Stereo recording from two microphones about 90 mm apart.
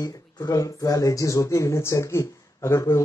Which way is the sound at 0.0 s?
40° left (ahead or behind).